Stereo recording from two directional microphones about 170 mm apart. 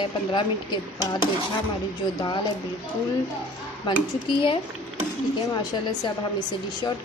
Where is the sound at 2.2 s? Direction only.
25° left (ahead or behind).